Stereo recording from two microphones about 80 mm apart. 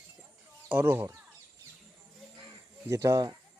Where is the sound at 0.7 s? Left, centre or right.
Right.